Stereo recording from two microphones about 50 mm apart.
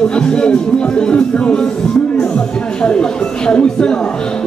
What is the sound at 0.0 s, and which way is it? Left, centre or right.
Speech, centre.